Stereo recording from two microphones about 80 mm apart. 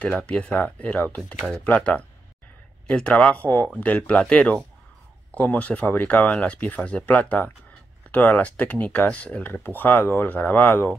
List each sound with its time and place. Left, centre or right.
0.0 s speech: centre